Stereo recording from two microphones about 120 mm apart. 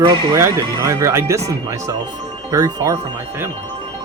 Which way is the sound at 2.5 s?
30° right (ahead or behind).